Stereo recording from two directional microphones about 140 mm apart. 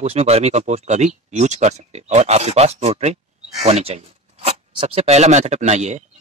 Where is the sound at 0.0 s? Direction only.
45° right (ahead or behind).